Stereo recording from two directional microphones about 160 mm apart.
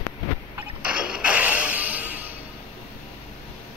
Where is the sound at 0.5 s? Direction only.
5° right (ahead or behind).